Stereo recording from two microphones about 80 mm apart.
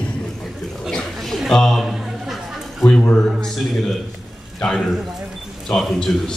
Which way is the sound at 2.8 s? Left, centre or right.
Centre.